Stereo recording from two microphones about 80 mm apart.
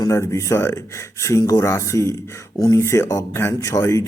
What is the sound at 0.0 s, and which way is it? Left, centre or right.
A man's voice, left.